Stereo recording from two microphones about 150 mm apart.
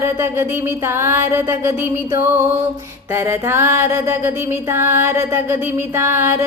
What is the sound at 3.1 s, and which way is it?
Music, 15° right (ahead or behind).